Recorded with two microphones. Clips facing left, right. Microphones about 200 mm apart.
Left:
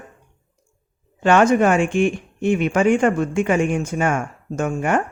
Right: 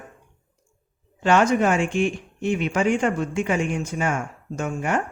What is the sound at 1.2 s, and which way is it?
Speech, 55° left (ahead or behind).